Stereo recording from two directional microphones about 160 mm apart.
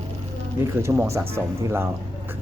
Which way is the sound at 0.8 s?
15° right (ahead or behind).